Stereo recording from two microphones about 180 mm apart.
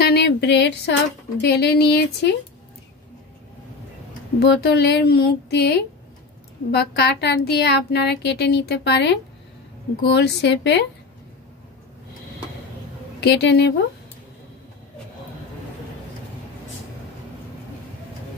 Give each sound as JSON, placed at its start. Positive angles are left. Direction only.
{"t": 0.0, "sound": "a sound", "side_deg": 65}
{"t": 1.4, "sound": "speech", "side_deg": 65}
{"t": 4.4, "sound": "a woman's voice", "side_deg": 65}
{"t": 13.2, "sound": "a woman's voice", "side_deg": 70}